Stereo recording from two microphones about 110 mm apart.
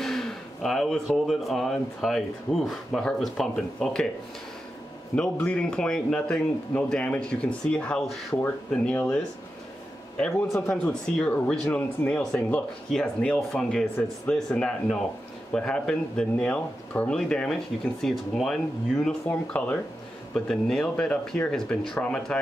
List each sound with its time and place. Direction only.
0.0 s speech: 5° left (ahead or behind)
5.1 s speech: 10° left (ahead or behind)
8.4 s speech: 15° left (ahead or behind)
10.7 s speech: 10° left (ahead or behind)